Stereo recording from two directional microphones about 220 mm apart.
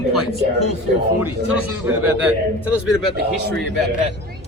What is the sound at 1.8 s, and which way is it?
Speech, 5° right (ahead or behind).